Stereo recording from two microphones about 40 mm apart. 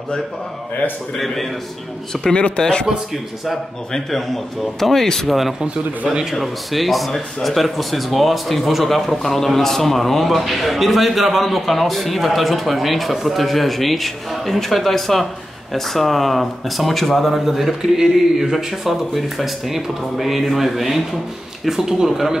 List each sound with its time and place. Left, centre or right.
1.1 s a man's voice: centre
2.2 s speech: left
3.9 s speech: centre
5.6 s speech: right
6.3 s a man's voice: centre